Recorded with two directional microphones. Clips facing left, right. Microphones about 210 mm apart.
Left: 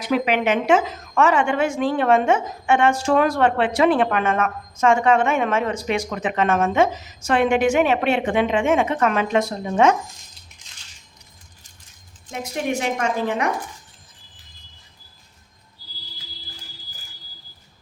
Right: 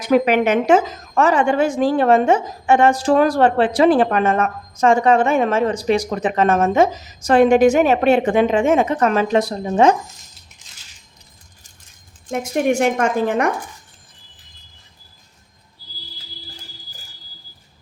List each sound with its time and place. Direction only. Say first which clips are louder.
0.0 s a woman's voice: right 5 dB; 45° right (ahead or behind)
12.3 s a woman's voice: right 7 dB; 50° right (ahead or behind)